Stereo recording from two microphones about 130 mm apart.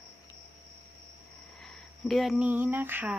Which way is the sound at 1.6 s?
Centre (ahead or behind).